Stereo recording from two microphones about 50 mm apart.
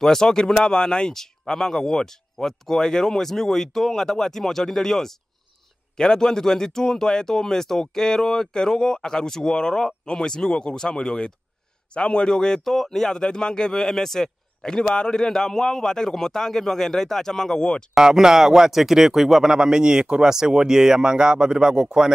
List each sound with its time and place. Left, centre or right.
0.0 s speech: centre
17.9 s speech: centre